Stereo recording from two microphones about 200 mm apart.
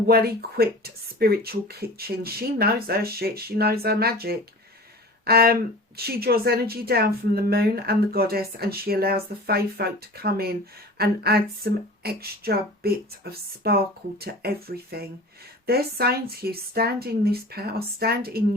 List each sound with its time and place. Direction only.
0.1 s speech: 50° right (ahead or behind)